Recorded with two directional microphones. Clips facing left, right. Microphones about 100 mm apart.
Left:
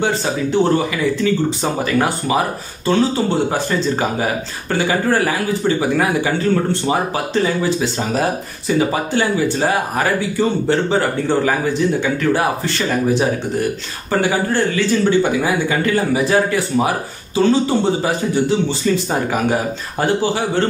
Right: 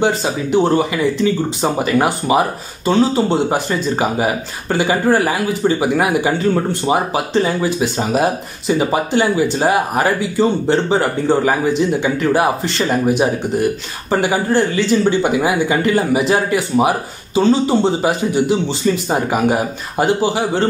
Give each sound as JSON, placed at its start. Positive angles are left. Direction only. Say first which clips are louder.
{"t": 0.0, "sound": "speech", "louder": "right 2 dB", "side_deg": -15}